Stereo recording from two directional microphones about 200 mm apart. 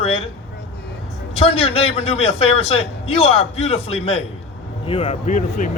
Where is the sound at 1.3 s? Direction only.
30° left (ahead or behind).